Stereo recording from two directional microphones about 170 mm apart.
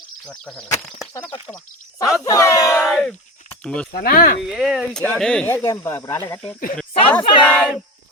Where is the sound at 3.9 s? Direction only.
60° left (ahead or behind).